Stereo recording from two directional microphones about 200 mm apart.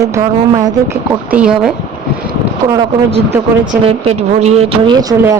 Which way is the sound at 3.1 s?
30° right (ahead or behind).